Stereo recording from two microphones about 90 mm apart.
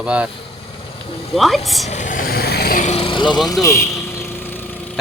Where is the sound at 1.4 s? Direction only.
Centre (ahead or behind).